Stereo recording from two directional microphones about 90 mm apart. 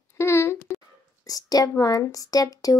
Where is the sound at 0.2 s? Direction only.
30° left (ahead or behind).